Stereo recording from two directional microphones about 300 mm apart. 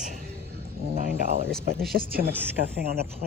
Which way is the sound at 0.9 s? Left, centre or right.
Right.